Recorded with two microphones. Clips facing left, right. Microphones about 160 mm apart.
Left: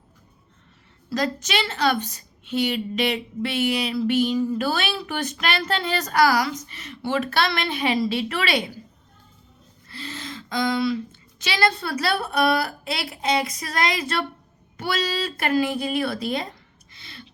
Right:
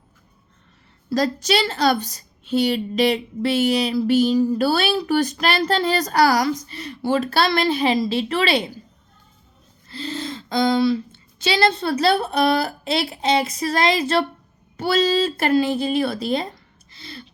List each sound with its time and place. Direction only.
1.1 s a woman's voice: 35° right (ahead or behind)
9.9 s speech: 30° right (ahead or behind)
16.9 s gasp: 35° right (ahead or behind)